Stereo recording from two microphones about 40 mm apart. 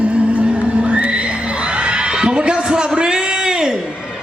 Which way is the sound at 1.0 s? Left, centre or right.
Right.